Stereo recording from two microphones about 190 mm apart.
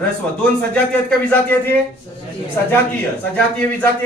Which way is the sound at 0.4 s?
5° left (ahead or behind).